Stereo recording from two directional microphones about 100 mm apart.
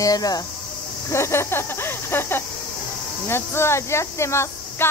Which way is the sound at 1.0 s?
30° left (ahead or behind).